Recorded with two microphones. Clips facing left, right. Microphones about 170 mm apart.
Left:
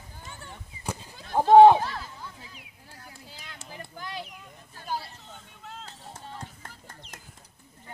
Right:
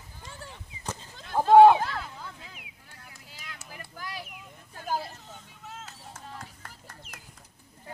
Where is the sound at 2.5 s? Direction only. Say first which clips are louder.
Left 2 dB; 30° left (ahead or behind).